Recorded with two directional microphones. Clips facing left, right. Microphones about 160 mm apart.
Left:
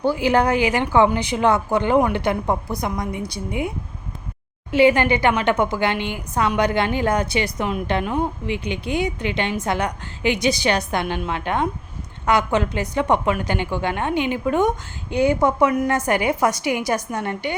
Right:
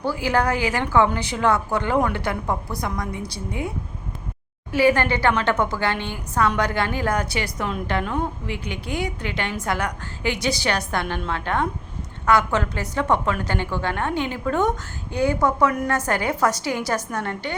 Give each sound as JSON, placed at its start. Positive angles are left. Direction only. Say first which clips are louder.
{"t": 0.0, "sound": "a woman's voice", "louder": "left 4 dB", "side_deg": 20}
{"t": 4.7, "sound": "a woman's voice", "louder": "left 3 dB", "side_deg": 20}